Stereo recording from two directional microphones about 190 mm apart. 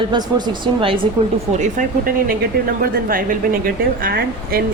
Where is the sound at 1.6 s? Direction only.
45° right (ahead or behind).